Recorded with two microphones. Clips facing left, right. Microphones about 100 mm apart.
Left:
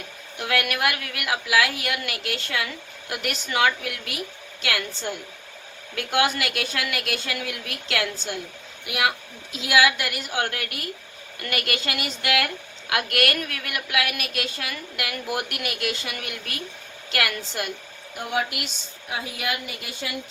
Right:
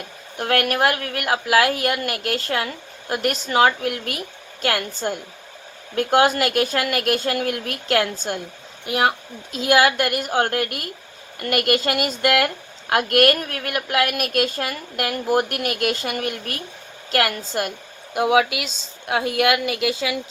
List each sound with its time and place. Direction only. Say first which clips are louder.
0.3 s a woman's voice: right 5 dB; 45° right (ahead or behind)
18.1 s speech: right 9 dB; 90° right
19.0 s a woman's voice: right 10 dB; 65° right (ahead or behind); by 20.1 s 90° right